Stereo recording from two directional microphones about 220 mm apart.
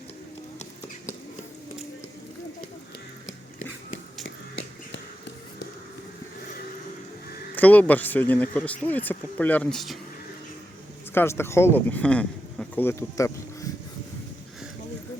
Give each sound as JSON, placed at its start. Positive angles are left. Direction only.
{"t": 3.2, "sound": "a sound", "side_deg": 60}
{"t": 7.5, "sound": "speech", "side_deg": 10}
{"t": 11.1, "sound": "speech", "side_deg": 10}